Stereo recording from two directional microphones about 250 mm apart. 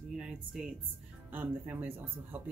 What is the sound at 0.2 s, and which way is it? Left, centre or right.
Speech, centre.